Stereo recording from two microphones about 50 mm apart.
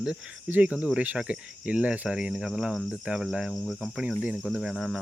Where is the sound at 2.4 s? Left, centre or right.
Centre.